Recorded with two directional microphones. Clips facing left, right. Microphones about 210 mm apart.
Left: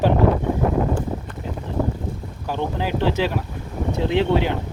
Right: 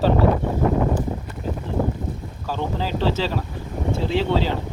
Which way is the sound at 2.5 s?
15° left (ahead or behind).